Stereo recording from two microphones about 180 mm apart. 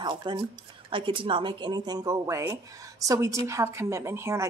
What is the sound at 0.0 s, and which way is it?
Speech, 25° right (ahead or behind).